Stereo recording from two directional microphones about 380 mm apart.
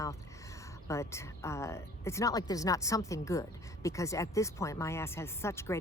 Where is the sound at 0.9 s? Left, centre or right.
Centre.